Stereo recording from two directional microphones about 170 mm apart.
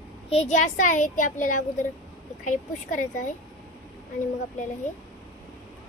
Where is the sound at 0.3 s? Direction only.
40° left (ahead or behind).